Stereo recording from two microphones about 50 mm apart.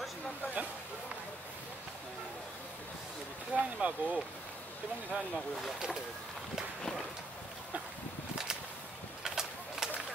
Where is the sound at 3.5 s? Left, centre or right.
Right.